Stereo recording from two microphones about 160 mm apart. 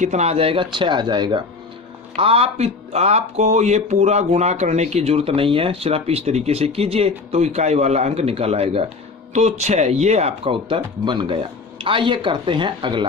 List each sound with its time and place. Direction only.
0.0 s speech: 45° right (ahead or behind); by 13.1 s 30° right (ahead or behind)